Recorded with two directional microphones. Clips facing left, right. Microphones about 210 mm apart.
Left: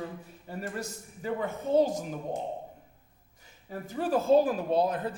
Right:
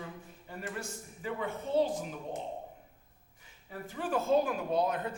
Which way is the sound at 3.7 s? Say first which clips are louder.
Left 6 dB; 40° left (ahead or behind).